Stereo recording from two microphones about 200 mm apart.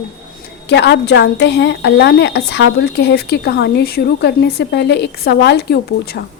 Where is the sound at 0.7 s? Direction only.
60° left (ahead or behind).